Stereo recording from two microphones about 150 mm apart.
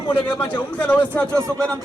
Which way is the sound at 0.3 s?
10° left (ahead or behind).